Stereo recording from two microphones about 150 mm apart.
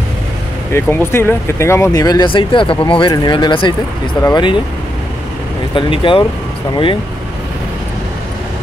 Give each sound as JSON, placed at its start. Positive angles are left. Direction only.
{"t": 0.7, "sound": "speech", "side_deg": 15}
{"t": 5.8, "sound": "speech", "side_deg": 35}